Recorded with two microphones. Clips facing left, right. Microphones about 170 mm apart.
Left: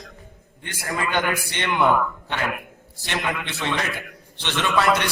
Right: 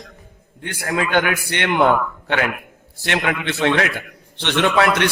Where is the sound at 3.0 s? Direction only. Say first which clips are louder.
Right 6 dB; 65° right (ahead or behind).